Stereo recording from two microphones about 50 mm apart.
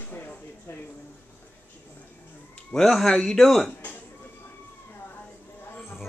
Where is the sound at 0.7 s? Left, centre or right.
Left.